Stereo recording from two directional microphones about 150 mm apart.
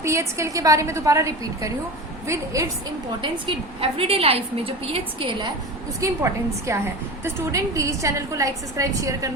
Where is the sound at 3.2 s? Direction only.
35° right (ahead or behind).